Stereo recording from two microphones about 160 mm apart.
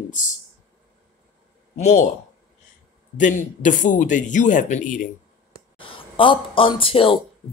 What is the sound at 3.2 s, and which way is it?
Speech, 55° left (ahead or behind).